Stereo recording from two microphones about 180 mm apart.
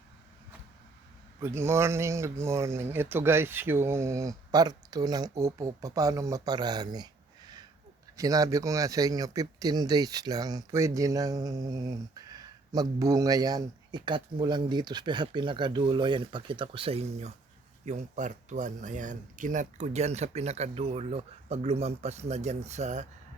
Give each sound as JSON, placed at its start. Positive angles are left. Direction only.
{"t": 1.4, "sound": "speech", "side_deg": -15}